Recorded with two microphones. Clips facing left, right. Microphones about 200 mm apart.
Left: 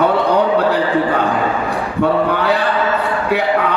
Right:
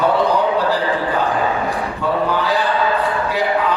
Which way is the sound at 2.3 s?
60° left (ahead or behind).